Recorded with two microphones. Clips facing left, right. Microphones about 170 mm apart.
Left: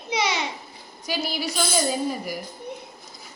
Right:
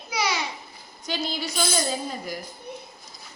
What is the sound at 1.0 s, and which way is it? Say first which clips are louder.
Speech: left 2 dB; 10° left (ahead or behind).